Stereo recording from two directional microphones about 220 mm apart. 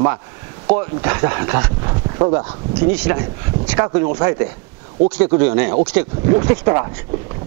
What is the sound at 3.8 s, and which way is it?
Speech, 25° right (ahead or behind).